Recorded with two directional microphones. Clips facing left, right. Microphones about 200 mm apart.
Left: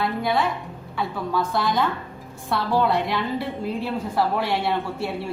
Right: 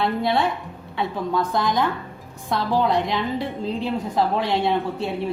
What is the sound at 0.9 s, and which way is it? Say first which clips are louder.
A woman's voice: right 2 dB; 15° right (ahead or behind).